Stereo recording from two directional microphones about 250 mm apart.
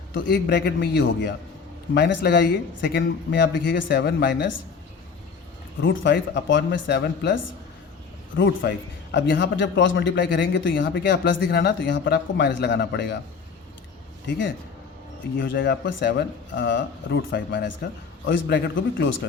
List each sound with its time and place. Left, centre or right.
0.1 s speech: left
5.8 s a man's voice: left
8.4 s a man's voice: left
15.4 s a man's voice: left